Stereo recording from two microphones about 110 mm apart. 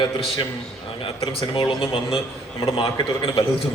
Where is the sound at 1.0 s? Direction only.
60° left (ahead or behind).